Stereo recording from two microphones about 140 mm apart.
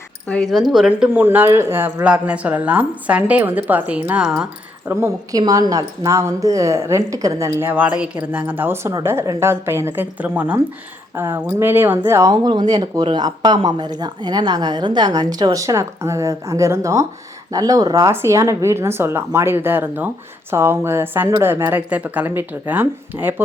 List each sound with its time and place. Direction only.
0.3 s speech: 5° left (ahead or behind)
0.7 s a woman's voice: 5° right (ahead or behind)
4.9 s a woman's voice: 15° right (ahead or behind)